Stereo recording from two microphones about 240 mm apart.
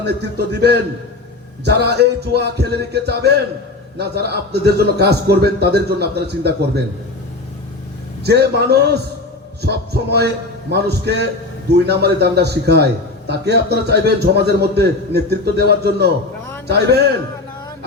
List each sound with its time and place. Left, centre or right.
0.0 s a man's voice: right
8.2 s a man's voice: right